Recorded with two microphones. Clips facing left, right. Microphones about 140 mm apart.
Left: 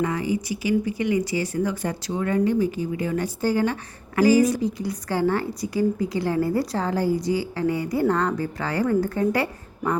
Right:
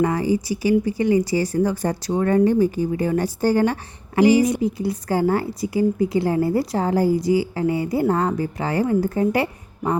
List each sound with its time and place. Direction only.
0.0 s speech: 35° right (ahead or behind)
4.1 s a woman's voice: 25° right (ahead or behind)
5.0 s a woman's voice: 35° right (ahead or behind)